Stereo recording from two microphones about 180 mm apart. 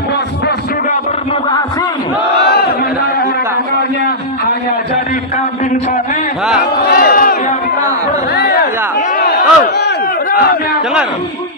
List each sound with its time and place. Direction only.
2.4 s crowd: 60° left (ahead or behind)
6.6 s crowd: 55° left (ahead or behind)
8.4 s a sound: 65° left (ahead or behind)
9.2 s battle cry: 65° left (ahead or behind)